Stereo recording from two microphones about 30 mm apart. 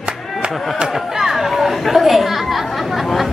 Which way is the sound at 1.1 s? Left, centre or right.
Centre.